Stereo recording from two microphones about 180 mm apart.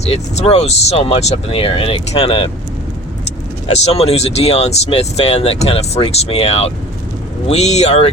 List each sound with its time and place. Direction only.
0.0 s speech: 35° left (ahead or behind)
3.7 s speech: 35° left (ahead or behind)